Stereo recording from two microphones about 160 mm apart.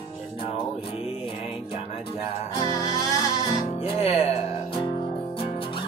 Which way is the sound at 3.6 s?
40° left (ahead or behind).